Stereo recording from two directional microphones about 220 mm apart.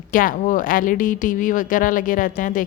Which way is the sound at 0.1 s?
40° left (ahead or behind).